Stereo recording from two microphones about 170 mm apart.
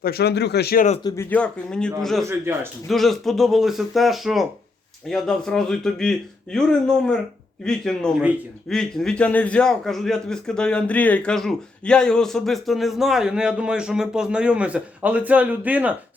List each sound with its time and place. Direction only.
0.0 s speech: 70° left (ahead or behind)
1.0 s a man's voice: 15° left (ahead or behind); by 16.0 s 10° right (ahead or behind)